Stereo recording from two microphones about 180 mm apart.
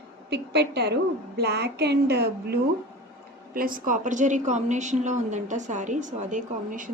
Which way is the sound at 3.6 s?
50° right (ahead or behind).